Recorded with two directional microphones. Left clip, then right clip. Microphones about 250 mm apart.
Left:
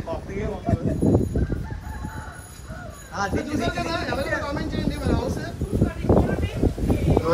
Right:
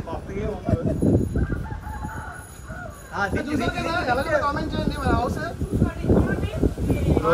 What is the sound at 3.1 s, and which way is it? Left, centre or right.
Speech, centre.